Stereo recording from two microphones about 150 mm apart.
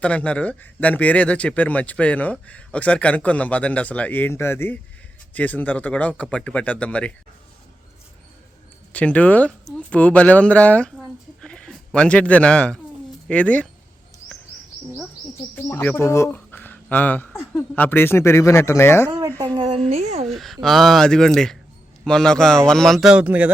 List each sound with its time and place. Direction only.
0.0 s speech: 10° left (ahead or behind)
8.9 s speech: 10° left (ahead or behind)
10.9 s a sound: 5° left (ahead or behind)
13.2 s speech: 10° left (ahead or behind)
15.5 s speech: 15° left (ahead or behind)
19.5 s speech: 35° right (ahead or behind)
20.2 s a man's voice: centre (ahead or behind)